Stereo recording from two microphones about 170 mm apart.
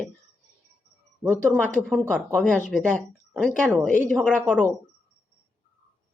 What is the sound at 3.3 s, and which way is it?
Speech, 5° right (ahead or behind).